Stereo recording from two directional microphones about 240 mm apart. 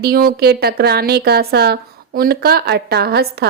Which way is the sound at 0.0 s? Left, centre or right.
Right.